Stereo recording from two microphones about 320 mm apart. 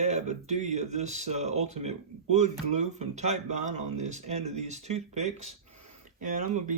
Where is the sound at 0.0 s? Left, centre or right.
Right.